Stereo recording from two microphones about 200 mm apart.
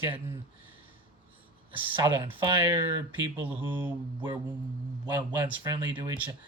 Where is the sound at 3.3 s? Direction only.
10° right (ahead or behind).